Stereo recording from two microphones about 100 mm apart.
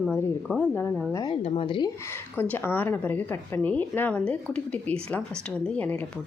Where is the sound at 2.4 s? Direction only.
20° left (ahead or behind).